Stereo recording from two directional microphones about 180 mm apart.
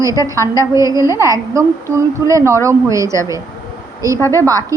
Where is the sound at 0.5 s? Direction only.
15° right (ahead or behind).